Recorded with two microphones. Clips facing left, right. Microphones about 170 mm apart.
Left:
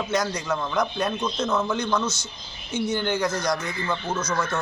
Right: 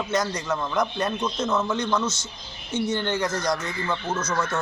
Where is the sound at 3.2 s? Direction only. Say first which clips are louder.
Left 1 dB; 25° right (ahead or behind).